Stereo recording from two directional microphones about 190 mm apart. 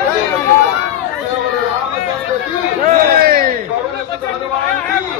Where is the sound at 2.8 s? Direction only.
50° right (ahead or behind).